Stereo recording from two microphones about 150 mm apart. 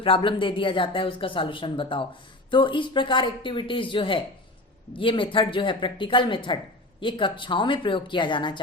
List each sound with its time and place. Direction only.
0.0 s speech: 35° left (ahead or behind)